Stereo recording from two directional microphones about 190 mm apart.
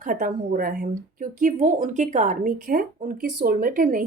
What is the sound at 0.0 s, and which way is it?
Speech, 45° right (ahead or behind).